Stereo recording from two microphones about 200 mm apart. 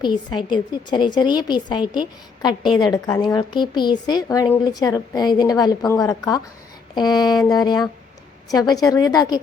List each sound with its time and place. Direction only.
0.0 s a woman's voice: 20° left (ahead or behind)